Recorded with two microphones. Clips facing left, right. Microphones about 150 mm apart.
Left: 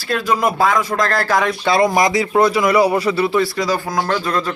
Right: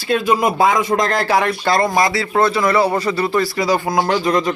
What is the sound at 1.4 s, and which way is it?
Speech, centre (ahead or behind).